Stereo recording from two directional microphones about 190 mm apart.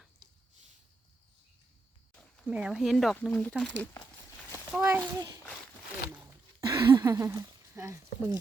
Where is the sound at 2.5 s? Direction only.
5° right (ahead or behind).